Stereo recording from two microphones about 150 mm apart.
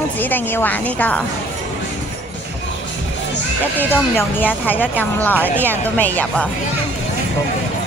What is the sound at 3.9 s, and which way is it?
A woman's voice, 15° left (ahead or behind).